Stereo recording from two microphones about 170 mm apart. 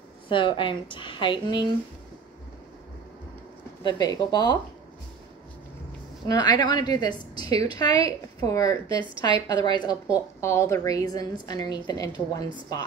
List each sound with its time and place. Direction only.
0.3 s a woman's voice: 30° left (ahead or behind)
3.8 s a woman's voice: 20° left (ahead or behind)
6.2 s a woman's voice: 25° left (ahead or behind)
8.9 s a woman's voice: 30° right (ahead or behind)
9.5 s a woman's voice: 25° left (ahead or behind)